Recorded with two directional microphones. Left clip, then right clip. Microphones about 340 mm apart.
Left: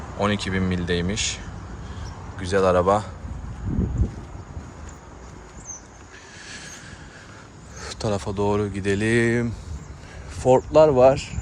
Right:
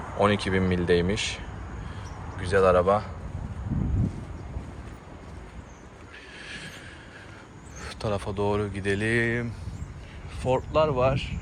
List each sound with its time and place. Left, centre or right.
0.2 s speech: centre
2.4 s speech: centre
7.8 s speech: centre